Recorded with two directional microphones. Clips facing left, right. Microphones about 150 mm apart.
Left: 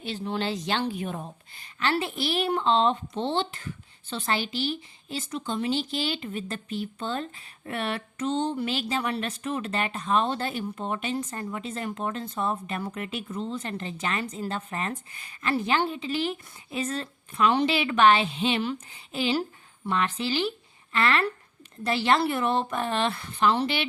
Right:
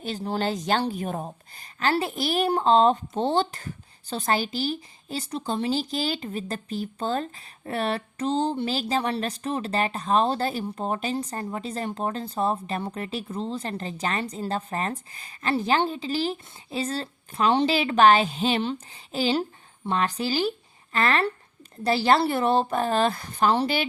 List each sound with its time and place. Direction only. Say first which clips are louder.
0.0 s a woman's voice: right 2 dB; 40° right (ahead or behind)